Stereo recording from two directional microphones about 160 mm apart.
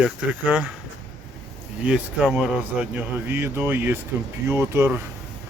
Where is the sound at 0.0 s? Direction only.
5° right (ahead or behind).